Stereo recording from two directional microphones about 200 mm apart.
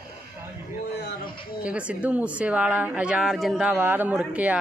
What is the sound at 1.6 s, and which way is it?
Speech, 5° right (ahead or behind).